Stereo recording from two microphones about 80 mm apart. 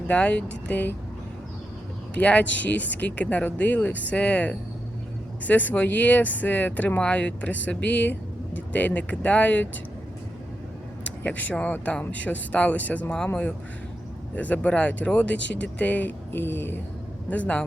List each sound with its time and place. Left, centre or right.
0.1 s speech: centre
2.1 s speech: centre
11.0 s speech: centre